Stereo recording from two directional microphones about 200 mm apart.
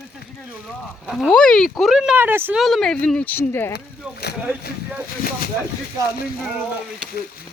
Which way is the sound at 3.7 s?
55° left (ahead or behind).